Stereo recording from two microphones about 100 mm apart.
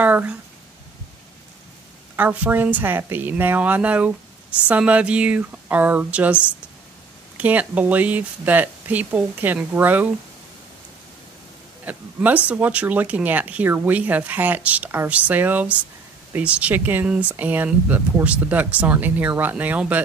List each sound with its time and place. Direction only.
0.0 s a sound: 15° right (ahead or behind)
2.1 s a woman's voice: 20° right (ahead or behind)
11.8 s speech: 15° right (ahead or behind)